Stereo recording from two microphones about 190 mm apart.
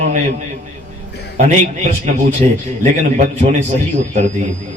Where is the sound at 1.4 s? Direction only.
40° right (ahead or behind).